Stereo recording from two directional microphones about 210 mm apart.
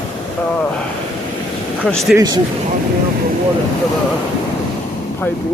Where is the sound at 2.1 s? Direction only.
20° right (ahead or behind).